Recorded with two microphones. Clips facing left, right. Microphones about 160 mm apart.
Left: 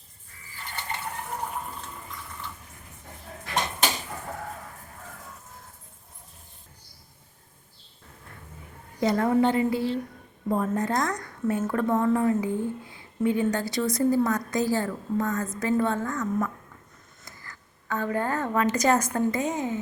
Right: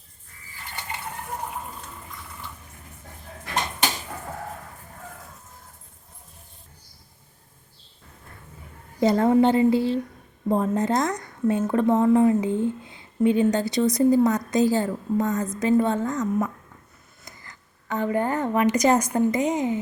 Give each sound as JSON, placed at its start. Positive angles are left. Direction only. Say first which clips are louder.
{"t": 9.0, "sound": "a woman's voice", "louder": "right 4 dB", "side_deg": -30}